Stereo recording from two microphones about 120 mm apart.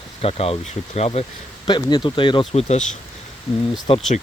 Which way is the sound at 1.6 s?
40° left (ahead or behind).